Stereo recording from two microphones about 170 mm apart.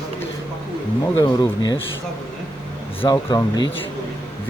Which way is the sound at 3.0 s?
30° left (ahead or behind).